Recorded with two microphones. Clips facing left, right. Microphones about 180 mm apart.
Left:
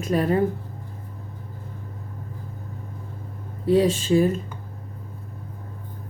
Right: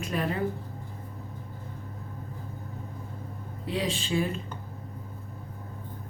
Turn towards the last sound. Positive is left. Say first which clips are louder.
# left 9 dB
turn(degrees=40)  # may be behind; listen again after turning